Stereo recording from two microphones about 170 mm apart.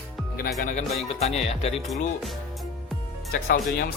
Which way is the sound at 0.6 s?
45° left (ahead or behind).